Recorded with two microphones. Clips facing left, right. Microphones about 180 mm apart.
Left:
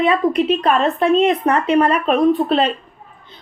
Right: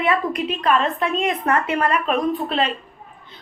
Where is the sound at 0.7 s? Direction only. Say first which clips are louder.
Left 4 dB; 45° left (ahead or behind).